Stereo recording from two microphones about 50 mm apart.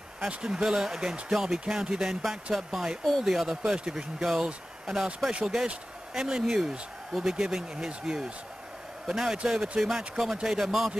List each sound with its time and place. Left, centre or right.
0.3 s speech: centre